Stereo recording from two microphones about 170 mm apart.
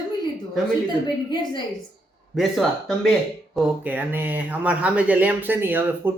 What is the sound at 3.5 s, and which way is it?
Speech, 10° right (ahead or behind).